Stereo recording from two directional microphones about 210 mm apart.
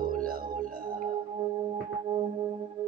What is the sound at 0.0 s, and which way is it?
Music, 45° right (ahead or behind).